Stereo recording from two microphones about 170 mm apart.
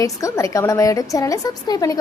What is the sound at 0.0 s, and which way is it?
A woman's voice, 20° left (ahead or behind).